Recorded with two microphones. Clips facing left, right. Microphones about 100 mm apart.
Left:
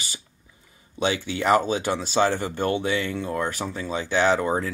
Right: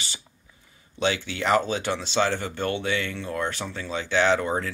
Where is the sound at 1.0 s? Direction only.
15° left (ahead or behind).